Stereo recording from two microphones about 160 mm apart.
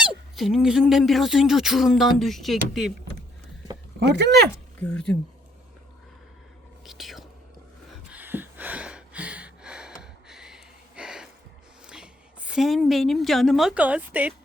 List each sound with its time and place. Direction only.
0.0 s speech: centre (ahead or behind)
4.1 s speech: 90° right
4.8 s speech: 5° left (ahead or behind)
6.8 s whispering: centre (ahead or behind)
8.1 s a sound: 10° right (ahead or behind)
11.9 s a woman's voice: 5° right (ahead or behind)